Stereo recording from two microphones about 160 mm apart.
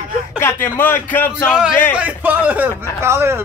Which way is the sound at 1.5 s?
5° right (ahead or behind).